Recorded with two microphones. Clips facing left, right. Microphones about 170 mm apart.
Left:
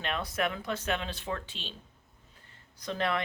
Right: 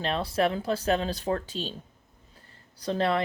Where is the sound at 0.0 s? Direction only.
30° right (ahead or behind).